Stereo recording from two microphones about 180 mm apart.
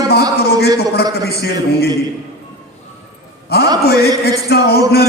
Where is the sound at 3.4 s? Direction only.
60° left (ahead or behind).